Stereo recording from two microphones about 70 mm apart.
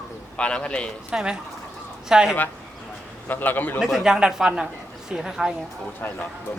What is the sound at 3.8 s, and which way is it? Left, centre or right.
Speech, centre.